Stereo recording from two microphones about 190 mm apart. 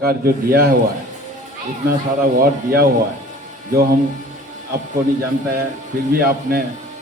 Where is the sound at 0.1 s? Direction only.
50° right (ahead or behind).